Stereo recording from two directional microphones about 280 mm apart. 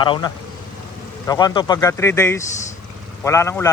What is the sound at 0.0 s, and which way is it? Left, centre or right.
Speech, centre.